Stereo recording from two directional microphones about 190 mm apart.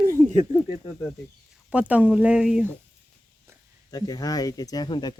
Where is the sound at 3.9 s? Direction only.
20° left (ahead or behind).